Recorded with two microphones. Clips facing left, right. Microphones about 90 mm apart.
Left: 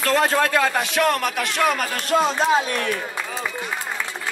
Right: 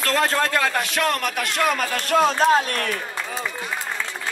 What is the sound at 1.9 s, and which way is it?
Speech, 15° left (ahead or behind).